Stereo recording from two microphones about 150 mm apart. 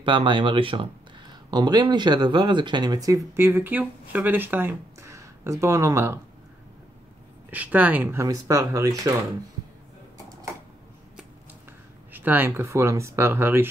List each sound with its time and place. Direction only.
0.0 s speech: 30° right (ahead or behind)
7.5 s speech: 10° right (ahead or behind)
12.1 s speech: 10° right (ahead or behind)